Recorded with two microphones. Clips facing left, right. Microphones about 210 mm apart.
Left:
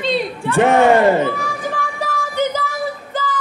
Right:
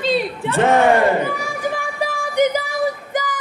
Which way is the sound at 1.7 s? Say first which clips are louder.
Even; 10° right (ahead or behind).